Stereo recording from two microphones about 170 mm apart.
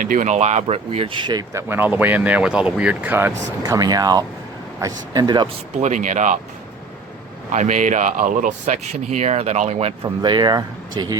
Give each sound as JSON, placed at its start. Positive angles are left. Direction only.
{"t": 0.0, "sound": "speech", "side_deg": -50}
{"t": 5.7, "sound": "speech", "side_deg": -45}
{"t": 7.5, "sound": "speech", "side_deg": -45}
{"t": 10.0, "sound": "speech", "side_deg": -25}